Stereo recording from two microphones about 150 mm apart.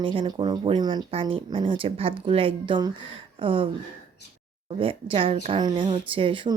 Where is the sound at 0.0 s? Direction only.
35° right (ahead or behind).